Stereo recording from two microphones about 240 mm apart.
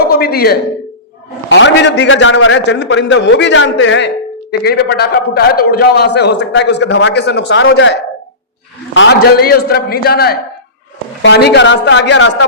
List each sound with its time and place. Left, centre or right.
0.1 s a sound: left
1.5 s a man's voice: left
9.0 s a man's voice: left